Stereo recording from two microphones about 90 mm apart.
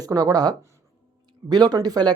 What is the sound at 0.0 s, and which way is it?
Speech, 45° right (ahead or behind).